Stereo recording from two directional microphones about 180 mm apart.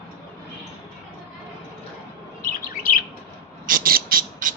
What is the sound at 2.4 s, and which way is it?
Chirp, 50° left (ahead or behind).